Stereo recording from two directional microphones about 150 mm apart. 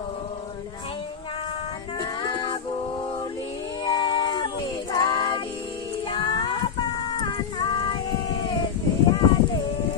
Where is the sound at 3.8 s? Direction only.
30° left (ahead or behind).